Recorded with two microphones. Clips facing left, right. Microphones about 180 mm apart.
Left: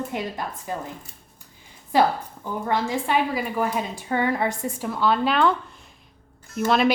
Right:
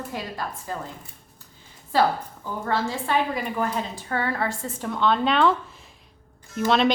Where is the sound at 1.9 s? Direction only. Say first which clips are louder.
Left 1 dB; 15° left (ahead or behind).